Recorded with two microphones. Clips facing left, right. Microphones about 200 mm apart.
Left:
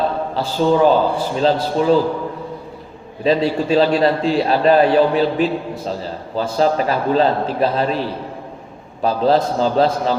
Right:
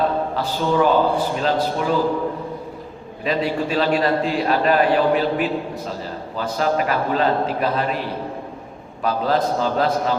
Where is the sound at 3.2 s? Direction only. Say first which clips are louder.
Left 5 dB; 30° left (ahead or behind).